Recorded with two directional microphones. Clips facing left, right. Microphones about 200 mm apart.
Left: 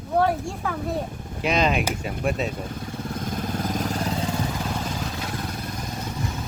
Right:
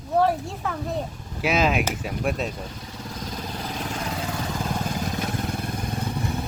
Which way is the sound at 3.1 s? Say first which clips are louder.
Left 4 dB; 50° left (ahead or behind).